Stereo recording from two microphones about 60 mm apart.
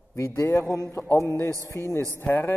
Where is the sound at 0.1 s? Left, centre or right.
Left.